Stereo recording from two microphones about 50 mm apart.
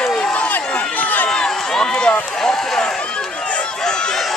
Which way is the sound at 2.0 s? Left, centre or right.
Centre.